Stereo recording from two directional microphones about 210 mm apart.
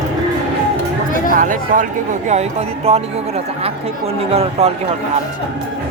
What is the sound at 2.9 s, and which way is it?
Speech, 30° right (ahead or behind).